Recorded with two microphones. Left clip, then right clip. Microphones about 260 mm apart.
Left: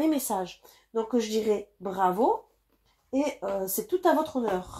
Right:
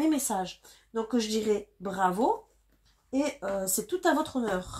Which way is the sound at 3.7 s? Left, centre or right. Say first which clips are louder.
Left 3 dB; right.